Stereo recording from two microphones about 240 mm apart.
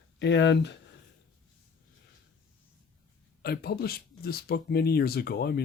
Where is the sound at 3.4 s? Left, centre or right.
Left.